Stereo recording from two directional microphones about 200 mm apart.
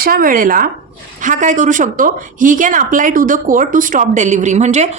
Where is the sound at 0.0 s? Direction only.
45° right (ahead or behind).